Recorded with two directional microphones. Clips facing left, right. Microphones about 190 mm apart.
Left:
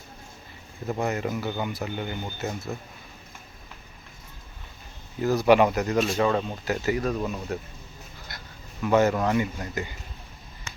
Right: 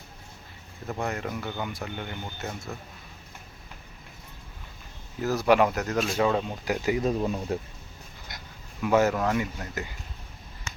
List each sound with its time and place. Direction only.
0.9 s speech: 5° left (ahead or behind)
5.2 s speech: centre (ahead or behind)
6.8 s speech: 20° right (ahead or behind)
8.3 s dog: 20° right (ahead or behind)
8.8 s speech: 5° right (ahead or behind)